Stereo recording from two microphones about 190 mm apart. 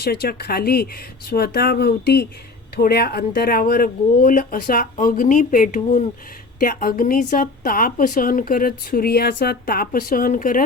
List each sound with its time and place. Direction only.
0.0 s a woman's voice: 55° left (ahead or behind)